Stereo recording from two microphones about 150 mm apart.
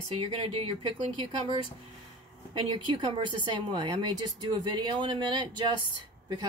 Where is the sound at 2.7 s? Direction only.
30° right (ahead or behind).